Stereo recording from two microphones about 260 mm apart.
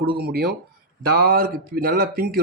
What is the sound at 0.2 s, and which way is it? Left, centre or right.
Speech, right.